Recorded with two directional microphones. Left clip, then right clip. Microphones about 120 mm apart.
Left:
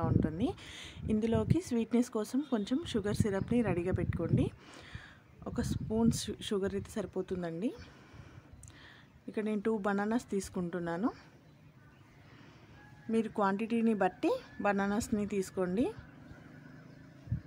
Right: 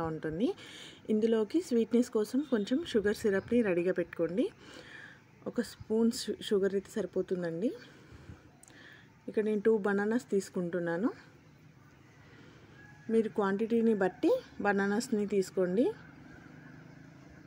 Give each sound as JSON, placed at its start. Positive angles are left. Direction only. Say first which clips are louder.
{"t": 0.0, "sound": "speech", "louder": "right 1 dB", "side_deg": -20}
{"t": 9.3, "sound": "speech", "louder": "right 6 dB", "side_deg": -15}
{"t": 13.1, "sound": "speech", "louder": "right 2 dB", "side_deg": -15}